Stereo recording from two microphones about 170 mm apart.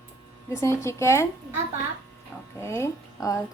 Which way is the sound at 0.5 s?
15° left (ahead or behind).